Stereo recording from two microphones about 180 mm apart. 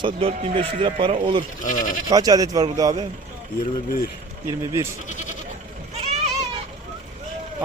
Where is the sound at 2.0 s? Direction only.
20° right (ahead or behind).